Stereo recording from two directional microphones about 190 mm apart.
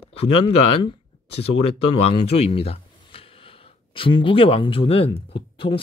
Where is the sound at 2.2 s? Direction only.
30° left (ahead or behind).